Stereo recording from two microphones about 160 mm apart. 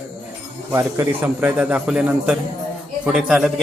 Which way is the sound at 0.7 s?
15° right (ahead or behind).